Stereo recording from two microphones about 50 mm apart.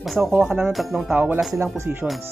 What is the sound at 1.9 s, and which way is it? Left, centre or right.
Speech, right.